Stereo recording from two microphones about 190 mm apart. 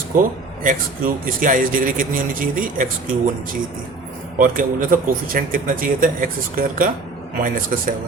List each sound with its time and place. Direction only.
0.1 s speech: 45° right (ahead or behind)
4.4 s speech: 45° right (ahead or behind)